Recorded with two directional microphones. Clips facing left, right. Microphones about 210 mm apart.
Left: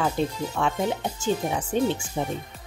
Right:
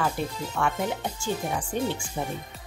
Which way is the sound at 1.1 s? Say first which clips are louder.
Left 4 dB; 20° left (ahead or behind).